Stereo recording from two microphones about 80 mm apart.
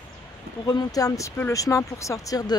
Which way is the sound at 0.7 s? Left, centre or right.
Left.